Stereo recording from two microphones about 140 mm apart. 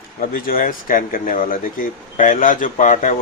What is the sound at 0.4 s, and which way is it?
Speech, 80° left.